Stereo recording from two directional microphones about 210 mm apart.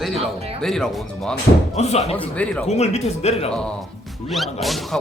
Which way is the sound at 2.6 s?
30° left (ahead or behind).